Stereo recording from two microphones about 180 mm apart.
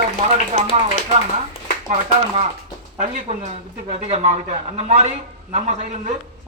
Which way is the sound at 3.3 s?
40° right (ahead or behind).